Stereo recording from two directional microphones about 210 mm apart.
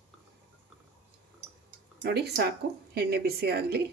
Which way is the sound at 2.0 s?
50° right (ahead or behind).